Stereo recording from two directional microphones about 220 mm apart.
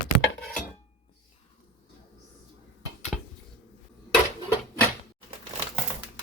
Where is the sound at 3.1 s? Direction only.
5° right (ahead or behind).